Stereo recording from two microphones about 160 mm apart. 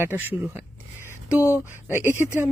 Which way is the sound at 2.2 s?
15° left (ahead or behind).